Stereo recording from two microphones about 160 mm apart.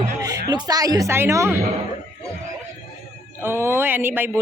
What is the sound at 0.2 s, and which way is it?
A man's voice, 25° right (ahead or behind).